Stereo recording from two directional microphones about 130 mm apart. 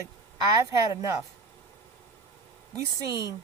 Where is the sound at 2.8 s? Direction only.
25° right (ahead or behind).